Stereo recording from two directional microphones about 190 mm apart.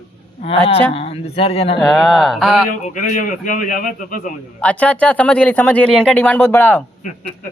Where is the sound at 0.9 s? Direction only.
30° left (ahead or behind).